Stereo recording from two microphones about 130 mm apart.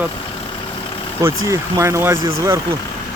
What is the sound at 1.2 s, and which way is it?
Speech, 20° right (ahead or behind).